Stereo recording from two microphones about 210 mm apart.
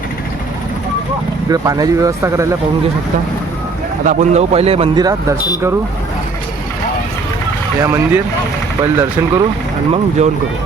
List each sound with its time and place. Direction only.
1.5 s speech: 15° right (ahead or behind)
4.0 s speech: 35° right (ahead or behind)
7.9 s speech: 15° right (ahead or behind)
10.2 s speech: 30° right (ahead or behind)